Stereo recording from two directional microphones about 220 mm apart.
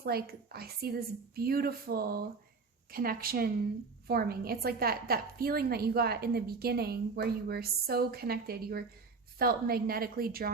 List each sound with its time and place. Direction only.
0.0 s a woman's voice: 45° right (ahead or behind)